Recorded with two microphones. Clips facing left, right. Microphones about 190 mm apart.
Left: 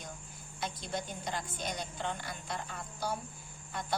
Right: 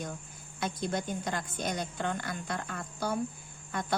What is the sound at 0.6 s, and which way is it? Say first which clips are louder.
A woman's voice: right 5 dB; 50° right (ahead or behind).